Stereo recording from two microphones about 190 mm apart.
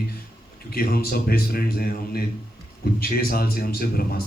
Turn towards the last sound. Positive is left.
turn(degrees=55)  # may be behind; listen again after turning